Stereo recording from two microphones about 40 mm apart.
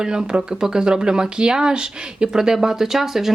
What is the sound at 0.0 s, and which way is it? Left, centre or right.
Speech, centre.